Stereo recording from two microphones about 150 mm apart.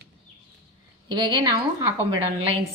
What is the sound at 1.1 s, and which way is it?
A woman's voice, 30° right (ahead or behind).